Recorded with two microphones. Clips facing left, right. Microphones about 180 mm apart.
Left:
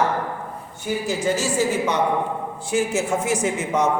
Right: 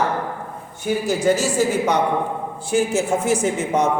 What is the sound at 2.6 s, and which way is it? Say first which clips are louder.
Speech: right 3 dB; 30° right (ahead or behind).